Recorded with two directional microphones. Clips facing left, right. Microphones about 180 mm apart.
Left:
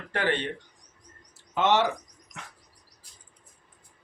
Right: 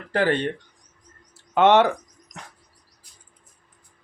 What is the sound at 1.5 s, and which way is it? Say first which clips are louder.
Speech: right 7 dB; 60° right (ahead or behind).